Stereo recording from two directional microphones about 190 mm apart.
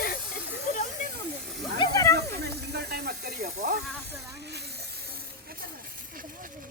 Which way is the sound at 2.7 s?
55° right (ahead or behind).